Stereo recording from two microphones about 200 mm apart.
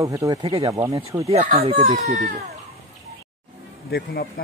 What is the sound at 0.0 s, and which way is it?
Speech, 15° right (ahead or behind).